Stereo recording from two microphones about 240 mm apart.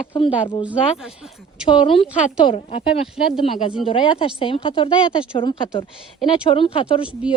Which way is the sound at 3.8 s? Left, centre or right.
Left.